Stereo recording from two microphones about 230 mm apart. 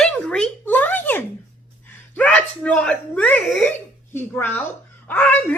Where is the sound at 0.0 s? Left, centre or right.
Centre.